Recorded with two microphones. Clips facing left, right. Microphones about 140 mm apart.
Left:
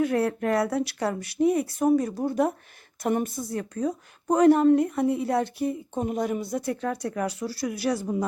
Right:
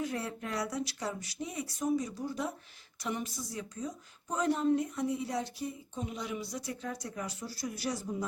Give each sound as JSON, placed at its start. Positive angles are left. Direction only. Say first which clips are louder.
{"t": 0.0, "sound": "speech", "louder": "left 12 dB", "side_deg": 60}